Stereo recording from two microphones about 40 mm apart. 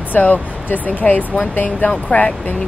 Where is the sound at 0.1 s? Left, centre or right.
Left.